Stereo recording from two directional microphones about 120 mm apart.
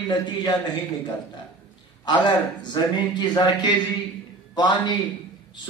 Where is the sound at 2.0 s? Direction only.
40° left (ahead or behind).